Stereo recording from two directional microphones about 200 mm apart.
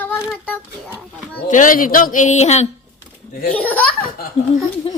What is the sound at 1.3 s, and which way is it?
Speech, 40° left (ahead or behind).